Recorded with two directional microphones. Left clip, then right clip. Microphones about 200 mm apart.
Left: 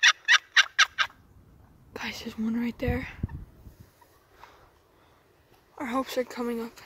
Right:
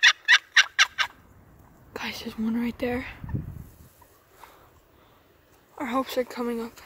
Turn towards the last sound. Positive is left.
turn(degrees=0)  # may be behind; listen again after turning